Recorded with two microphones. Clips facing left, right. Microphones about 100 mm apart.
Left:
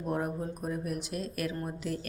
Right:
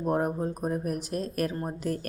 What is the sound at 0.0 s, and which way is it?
A woman's voice, 40° right (ahead or behind).